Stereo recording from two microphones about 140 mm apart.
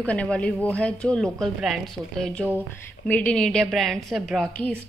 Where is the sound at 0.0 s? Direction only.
10° left (ahead or behind).